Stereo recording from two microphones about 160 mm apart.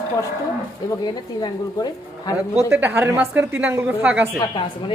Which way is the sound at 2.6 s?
15° right (ahead or behind).